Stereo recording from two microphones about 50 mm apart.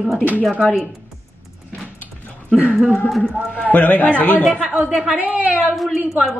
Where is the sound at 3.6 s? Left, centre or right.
Left.